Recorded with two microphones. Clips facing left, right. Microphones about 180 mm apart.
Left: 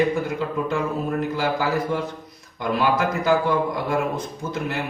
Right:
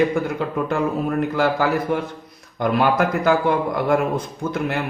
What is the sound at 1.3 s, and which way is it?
A man's voice, 55° right (ahead or behind).